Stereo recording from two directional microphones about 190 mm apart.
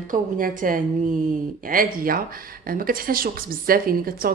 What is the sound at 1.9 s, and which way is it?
Speech, 50° right (ahead or behind).